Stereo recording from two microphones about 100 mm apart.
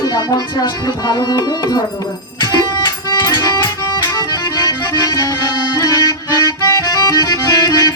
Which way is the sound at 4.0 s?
45° left (ahead or behind).